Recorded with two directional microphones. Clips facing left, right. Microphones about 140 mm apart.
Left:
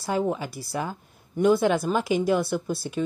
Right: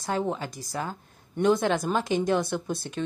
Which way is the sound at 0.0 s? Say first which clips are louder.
Left 3 dB; 10° left (ahead or behind).